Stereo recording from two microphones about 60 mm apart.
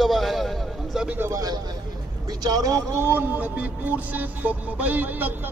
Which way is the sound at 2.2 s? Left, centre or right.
Right.